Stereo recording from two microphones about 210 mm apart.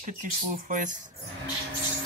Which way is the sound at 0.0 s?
40° right (ahead or behind).